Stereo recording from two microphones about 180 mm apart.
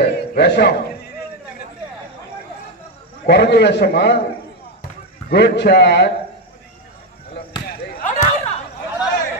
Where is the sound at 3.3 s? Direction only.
65° left (ahead or behind).